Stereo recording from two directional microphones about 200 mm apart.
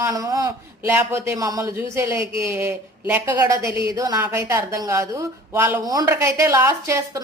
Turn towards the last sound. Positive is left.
turn(degrees=-15)  # may be behind; listen again after turning